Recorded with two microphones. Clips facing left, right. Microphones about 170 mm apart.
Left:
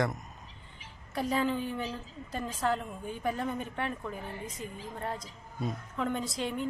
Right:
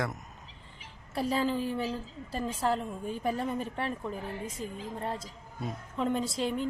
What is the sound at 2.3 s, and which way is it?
A woman's voice, 30° right (ahead or behind).